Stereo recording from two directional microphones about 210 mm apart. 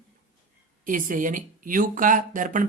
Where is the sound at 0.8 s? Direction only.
40° right (ahead or behind).